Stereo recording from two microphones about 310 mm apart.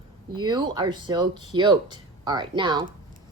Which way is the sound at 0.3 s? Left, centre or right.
Centre.